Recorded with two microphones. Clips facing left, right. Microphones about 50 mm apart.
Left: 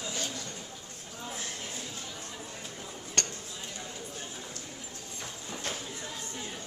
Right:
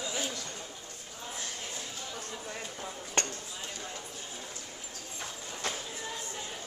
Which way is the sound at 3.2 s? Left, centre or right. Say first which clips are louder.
Right 2 dB; centre.